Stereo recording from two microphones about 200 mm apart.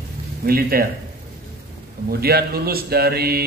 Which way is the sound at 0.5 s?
50° right (ahead or behind).